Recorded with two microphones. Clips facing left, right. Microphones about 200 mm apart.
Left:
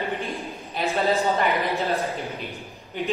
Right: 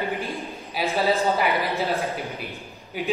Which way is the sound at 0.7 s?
Centre (ahead or behind).